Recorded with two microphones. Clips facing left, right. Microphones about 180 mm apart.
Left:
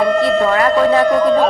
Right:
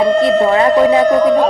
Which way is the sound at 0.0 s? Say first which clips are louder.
Right 2 dB; 20° right (ahead or behind).